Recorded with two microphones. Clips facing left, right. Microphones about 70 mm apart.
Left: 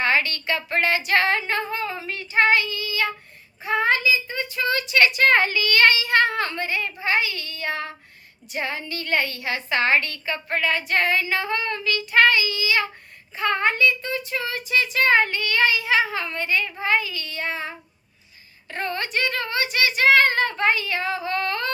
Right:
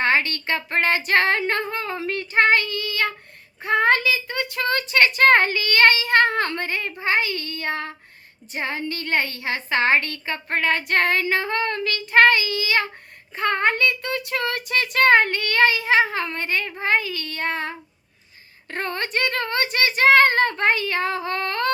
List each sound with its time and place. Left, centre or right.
0.0 s a woman's voice: right
3.6 s child singing: right
7.0 s a woman's voice: right
13.3 s child singing: right
18.7 s a woman's voice: right